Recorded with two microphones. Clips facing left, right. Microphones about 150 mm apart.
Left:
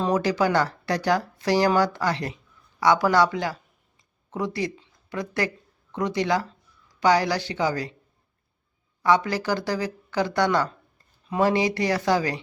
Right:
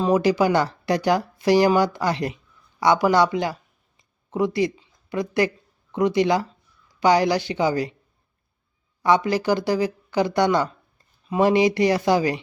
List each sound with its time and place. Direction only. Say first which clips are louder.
0.0 s speech: right 4 dB; 10° right (ahead or behind)
9.0 s speech: right 3 dB; 15° right (ahead or behind)